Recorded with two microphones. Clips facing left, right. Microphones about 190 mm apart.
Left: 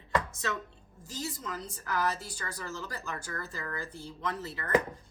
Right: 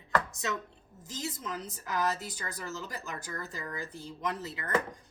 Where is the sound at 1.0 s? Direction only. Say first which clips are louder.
Even; 20° right (ahead or behind).